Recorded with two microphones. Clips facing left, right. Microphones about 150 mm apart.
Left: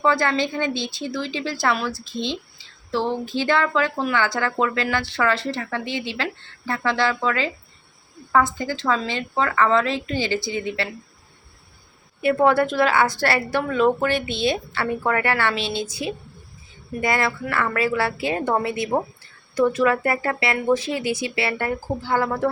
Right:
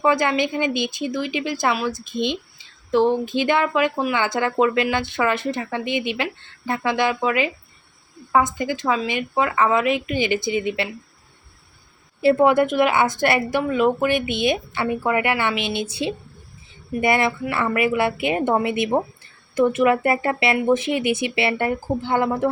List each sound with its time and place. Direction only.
0.0 s speech: 15° right (ahead or behind)
12.4 s speech: 15° right (ahead or behind)